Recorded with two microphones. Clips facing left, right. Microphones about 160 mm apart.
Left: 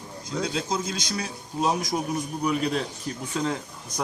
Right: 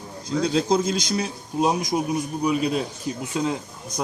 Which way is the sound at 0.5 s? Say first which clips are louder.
Right 8 dB; 30° right (ahead or behind).